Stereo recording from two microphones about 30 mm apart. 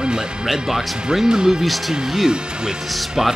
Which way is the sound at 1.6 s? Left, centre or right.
Centre.